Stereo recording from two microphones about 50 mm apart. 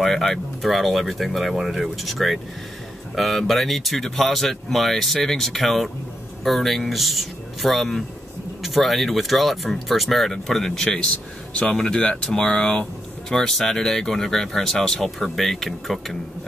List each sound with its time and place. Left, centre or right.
0.0 s speech: centre